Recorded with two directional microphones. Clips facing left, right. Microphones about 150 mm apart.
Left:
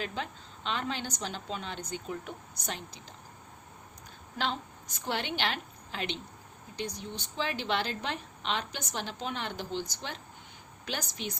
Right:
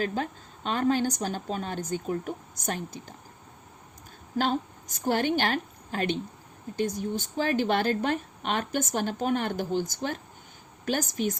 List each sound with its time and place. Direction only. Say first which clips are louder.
0.0 s speech: right 7 dB; 45° right (ahead or behind)
4.4 s a woman's voice: right 7 dB; 45° right (ahead or behind)